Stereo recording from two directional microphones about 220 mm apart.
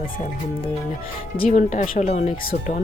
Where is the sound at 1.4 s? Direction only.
35° left (ahead or behind).